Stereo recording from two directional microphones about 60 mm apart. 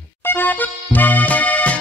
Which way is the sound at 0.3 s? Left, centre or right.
Left.